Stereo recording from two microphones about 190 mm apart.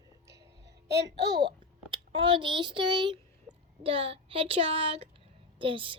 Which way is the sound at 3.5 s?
15° left (ahead or behind).